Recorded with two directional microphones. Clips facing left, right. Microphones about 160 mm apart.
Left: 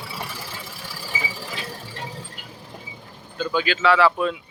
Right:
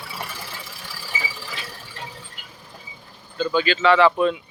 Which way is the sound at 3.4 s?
10° left (ahead or behind).